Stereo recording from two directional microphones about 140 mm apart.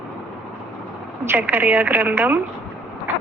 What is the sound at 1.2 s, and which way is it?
A woman's voice, 15° right (ahead or behind).